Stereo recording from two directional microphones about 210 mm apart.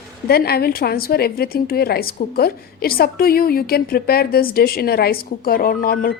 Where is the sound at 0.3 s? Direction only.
50° left (ahead or behind).